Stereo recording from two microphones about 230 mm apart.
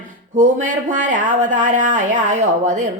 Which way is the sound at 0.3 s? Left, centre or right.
Right.